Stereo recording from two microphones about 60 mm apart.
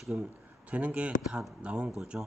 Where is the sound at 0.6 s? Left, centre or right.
Right.